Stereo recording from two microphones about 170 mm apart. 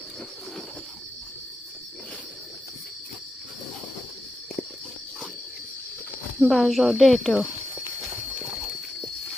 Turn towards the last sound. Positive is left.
turn(degrees=0)  # may be behind; listen again after turning